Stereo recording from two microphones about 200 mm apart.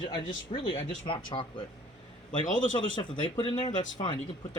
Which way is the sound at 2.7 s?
25° left (ahead or behind).